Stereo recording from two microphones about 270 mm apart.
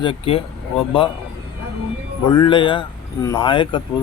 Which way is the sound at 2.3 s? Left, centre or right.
Centre.